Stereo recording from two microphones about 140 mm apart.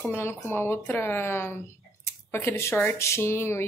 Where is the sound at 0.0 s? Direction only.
15° left (ahead or behind).